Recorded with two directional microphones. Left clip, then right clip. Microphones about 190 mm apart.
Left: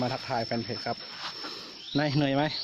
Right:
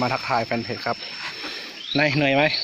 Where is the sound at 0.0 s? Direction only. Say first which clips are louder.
Right 8 dB; 20° left (ahead or behind).